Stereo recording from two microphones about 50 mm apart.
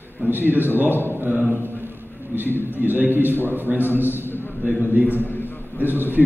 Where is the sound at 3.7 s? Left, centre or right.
Right.